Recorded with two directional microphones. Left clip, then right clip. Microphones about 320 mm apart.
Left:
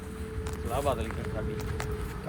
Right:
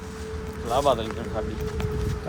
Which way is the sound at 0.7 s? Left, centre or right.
Centre.